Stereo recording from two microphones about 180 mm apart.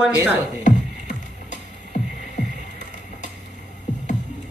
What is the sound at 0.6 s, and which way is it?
Music, 45° left (ahead or behind).